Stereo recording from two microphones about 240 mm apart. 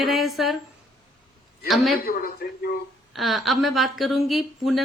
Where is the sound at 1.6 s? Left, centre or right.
Centre.